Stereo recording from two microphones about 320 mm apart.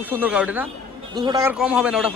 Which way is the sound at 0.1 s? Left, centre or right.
Centre.